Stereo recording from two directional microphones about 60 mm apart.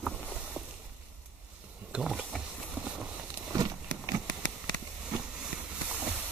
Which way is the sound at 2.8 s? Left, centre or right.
Right.